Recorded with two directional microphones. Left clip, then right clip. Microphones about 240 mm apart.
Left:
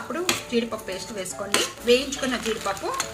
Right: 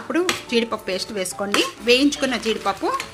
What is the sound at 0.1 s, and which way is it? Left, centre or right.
A woman's voice, right.